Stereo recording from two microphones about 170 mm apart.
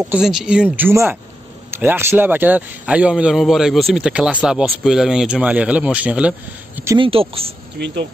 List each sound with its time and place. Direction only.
0.0 s speech: 5° right (ahead or behind)
7.0 s speech: 35° right (ahead or behind)
7.8 s speech: 70° right (ahead or behind)